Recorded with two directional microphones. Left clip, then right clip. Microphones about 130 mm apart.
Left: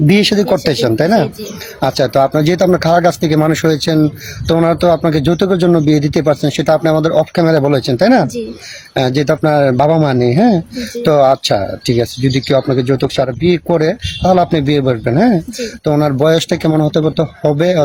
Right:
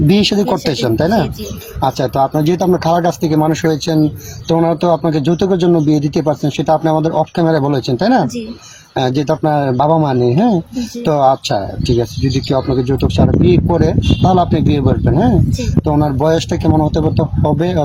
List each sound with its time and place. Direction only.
0.1 s speech: 35° left (ahead or behind)